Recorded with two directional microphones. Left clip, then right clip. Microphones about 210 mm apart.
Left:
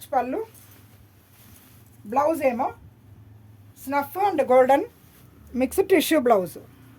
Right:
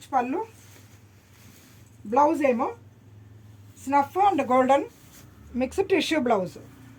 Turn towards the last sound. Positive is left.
turn(degrees=55)  # may be behind; listen again after turning